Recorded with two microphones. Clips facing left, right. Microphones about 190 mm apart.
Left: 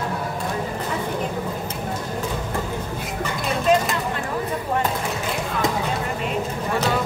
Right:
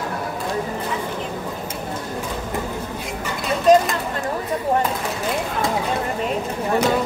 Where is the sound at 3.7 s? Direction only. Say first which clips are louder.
Right 5 dB; 40° right (ahead or behind).